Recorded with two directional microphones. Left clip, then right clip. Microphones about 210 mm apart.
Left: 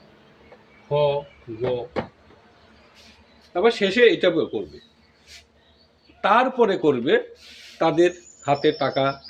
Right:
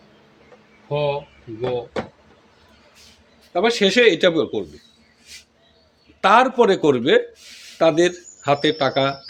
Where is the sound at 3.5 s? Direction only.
60° right (ahead or behind).